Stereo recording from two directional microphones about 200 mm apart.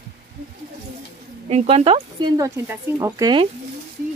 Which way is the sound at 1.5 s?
35° right (ahead or behind).